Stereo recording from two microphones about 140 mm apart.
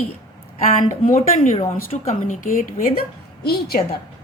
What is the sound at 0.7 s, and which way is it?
Speech, 70° left (ahead or behind).